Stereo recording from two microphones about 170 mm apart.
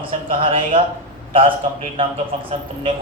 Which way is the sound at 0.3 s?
35° right (ahead or behind).